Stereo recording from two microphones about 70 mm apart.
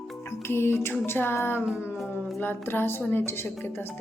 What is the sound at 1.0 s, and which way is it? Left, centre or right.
A woman's voice, left.